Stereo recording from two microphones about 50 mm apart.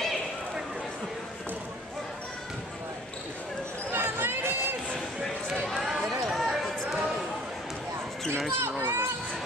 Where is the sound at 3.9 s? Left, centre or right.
Right.